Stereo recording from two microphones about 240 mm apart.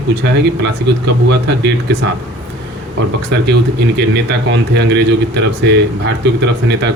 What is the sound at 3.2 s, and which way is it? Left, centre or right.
Speech, right.